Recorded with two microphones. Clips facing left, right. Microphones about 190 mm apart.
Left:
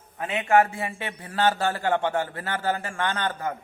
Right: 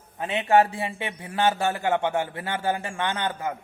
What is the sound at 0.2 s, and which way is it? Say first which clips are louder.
A man's voice: right 1 dB; 20° right (ahead or behind).